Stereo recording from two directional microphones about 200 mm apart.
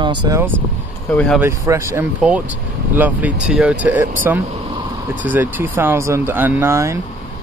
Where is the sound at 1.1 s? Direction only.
5° left (ahead or behind).